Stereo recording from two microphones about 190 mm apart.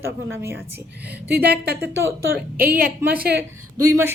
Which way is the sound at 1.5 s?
55° right (ahead or behind).